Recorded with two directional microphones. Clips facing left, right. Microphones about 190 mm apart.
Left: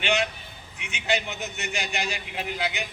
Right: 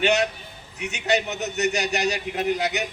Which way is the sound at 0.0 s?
40° right (ahead or behind).